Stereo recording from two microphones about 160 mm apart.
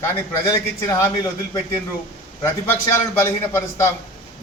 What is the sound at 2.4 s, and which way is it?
A man's voice, 15° left (ahead or behind).